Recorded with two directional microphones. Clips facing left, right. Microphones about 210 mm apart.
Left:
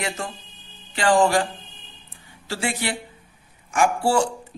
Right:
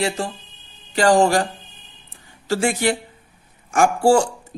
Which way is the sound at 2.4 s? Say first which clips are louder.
Right 7 dB; 45° right (ahead or behind).